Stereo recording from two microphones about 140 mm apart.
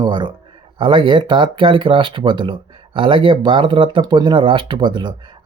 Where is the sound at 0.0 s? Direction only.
35° right (ahead or behind).